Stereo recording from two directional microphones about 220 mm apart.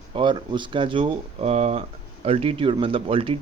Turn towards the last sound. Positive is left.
turn(degrees=-25)  # may be behind; listen again after turning